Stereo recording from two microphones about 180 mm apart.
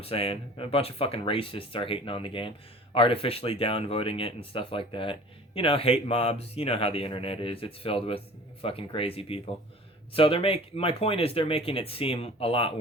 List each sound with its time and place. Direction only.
0.0 s speech: 30° left (ahead or behind)